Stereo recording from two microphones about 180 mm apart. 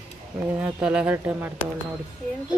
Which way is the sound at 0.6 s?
5° right (ahead or behind).